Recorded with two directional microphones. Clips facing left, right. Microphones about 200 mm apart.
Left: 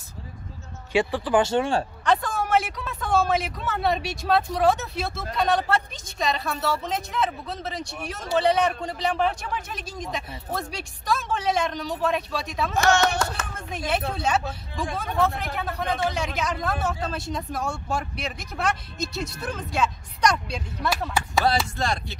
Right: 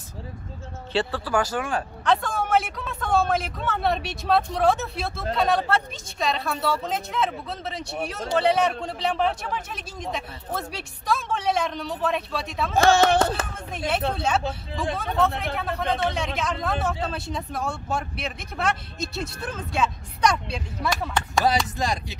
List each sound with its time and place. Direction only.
0.9 s speech: 15° left (ahead or behind)
2.0 s speech: centre (ahead or behind)
12.7 s speech: 30° right (ahead or behind)
13.8 s speech: centre (ahead or behind)